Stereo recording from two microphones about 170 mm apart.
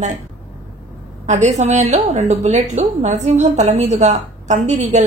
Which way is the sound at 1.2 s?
45° right (ahead or behind).